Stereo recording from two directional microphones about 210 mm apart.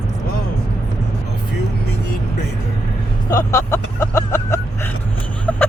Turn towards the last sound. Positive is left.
turn(degrees=5)  # may be behind; listen again after turning